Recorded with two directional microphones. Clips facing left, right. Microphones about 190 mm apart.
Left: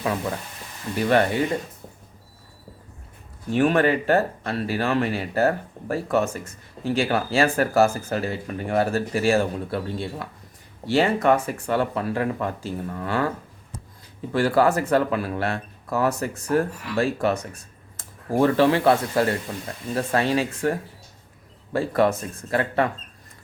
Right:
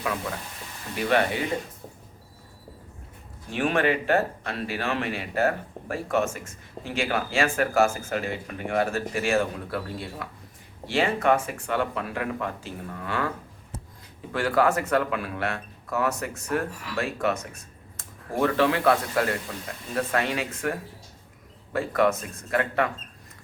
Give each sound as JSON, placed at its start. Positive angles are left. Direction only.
{"t": 3.5, "sound": "speech", "side_deg": 40}
{"t": 10.8, "sound": "speech", "side_deg": 40}
{"t": 14.3, "sound": "speech", "side_deg": 35}